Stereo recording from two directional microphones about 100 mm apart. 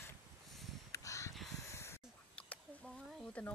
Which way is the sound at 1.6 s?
25° left (ahead or behind).